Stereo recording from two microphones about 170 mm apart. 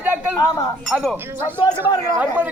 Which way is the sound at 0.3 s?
20° left (ahead or behind).